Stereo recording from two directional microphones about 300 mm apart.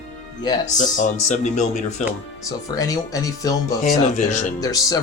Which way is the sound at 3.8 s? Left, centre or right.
Left.